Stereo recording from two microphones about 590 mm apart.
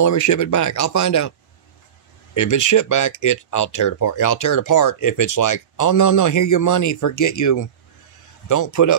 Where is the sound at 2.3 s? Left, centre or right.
Left.